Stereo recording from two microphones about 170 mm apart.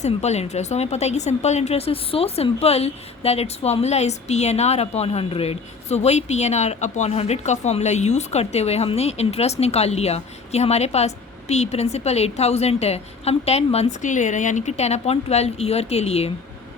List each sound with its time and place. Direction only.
0.0 s speech: 40° left (ahead or behind)